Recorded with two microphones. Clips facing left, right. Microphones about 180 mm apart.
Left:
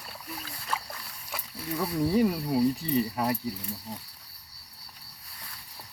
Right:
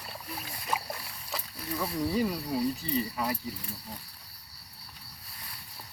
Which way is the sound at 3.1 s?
50° left (ahead or behind).